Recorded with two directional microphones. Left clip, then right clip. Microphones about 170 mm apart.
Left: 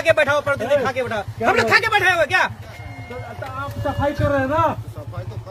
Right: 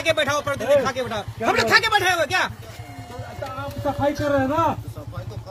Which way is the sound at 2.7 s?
55° right (ahead or behind).